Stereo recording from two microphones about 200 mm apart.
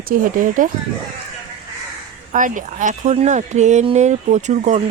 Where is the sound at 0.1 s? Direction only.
40° right (ahead or behind).